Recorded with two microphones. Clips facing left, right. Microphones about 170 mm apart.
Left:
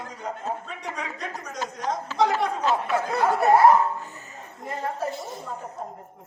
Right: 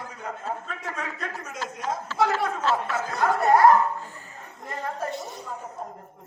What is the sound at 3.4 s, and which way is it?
Speech, centre (ahead or behind).